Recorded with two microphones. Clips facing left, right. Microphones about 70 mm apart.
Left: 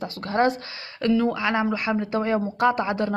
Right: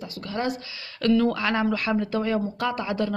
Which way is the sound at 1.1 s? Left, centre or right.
Centre.